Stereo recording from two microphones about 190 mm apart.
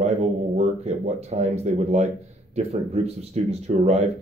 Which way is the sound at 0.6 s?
35° right (ahead or behind).